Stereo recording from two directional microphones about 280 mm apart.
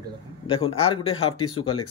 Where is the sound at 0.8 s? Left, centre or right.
Left.